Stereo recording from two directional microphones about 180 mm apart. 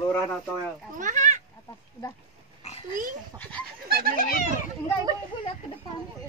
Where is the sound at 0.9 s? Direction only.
45° right (ahead or behind).